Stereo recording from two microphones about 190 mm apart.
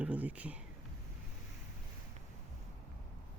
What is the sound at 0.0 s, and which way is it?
Speech, 10° right (ahead or behind).